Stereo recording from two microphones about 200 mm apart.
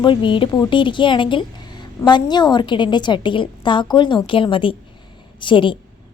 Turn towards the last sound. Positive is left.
turn(degrees=25)  # may be behind; listen again after turning